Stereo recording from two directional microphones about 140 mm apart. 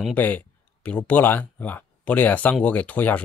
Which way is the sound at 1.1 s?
15° left (ahead or behind).